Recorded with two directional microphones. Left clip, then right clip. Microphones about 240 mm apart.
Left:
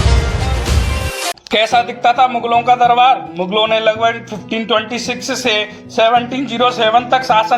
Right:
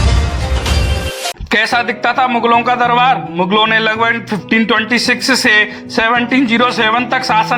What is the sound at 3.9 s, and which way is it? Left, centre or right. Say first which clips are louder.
Speech: right 2 dB; right.